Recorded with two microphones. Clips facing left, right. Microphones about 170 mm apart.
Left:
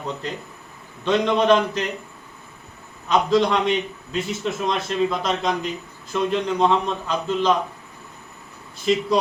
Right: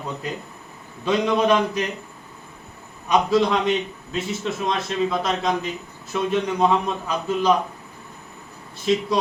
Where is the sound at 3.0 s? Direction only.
5° right (ahead or behind).